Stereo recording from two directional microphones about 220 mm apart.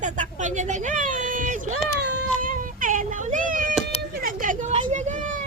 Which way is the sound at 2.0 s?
50° right (ahead or behind).